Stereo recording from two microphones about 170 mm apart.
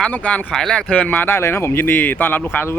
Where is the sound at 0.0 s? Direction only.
10° left (ahead or behind).